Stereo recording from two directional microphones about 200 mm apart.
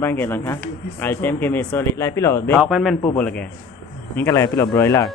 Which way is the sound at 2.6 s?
Centre (ahead or behind).